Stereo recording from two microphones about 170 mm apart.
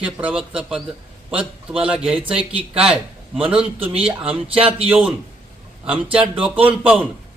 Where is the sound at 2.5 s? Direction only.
35° right (ahead or behind).